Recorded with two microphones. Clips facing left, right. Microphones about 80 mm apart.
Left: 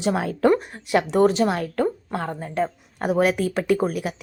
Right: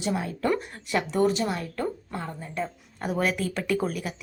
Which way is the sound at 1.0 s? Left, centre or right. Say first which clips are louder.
Left 5 dB; left.